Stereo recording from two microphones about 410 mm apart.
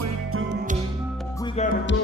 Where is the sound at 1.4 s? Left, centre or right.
Centre.